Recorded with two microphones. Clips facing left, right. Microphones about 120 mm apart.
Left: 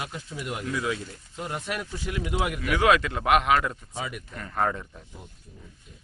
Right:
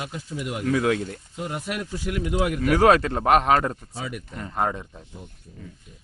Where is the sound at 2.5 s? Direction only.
45° right (ahead or behind).